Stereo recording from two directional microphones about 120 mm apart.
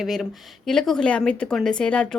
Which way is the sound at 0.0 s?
Centre (ahead or behind).